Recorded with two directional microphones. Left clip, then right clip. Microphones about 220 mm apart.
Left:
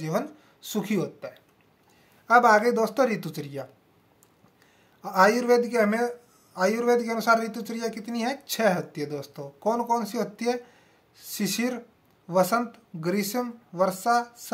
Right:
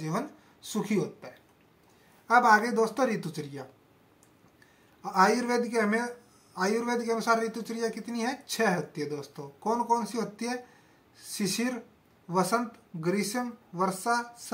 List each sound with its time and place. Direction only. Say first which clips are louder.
0.7 s speech: left 2 dB; 55° left (ahead or behind)
5.0 s speech: left 4 dB; 55° left (ahead or behind)